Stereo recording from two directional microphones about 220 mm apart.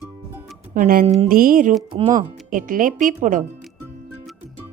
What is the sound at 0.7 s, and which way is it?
Speech, 40° right (ahead or behind).